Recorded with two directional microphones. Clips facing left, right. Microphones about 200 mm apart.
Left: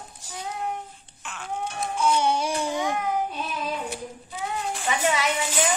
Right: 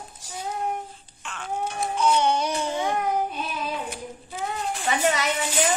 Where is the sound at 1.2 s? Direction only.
Centre (ahead or behind).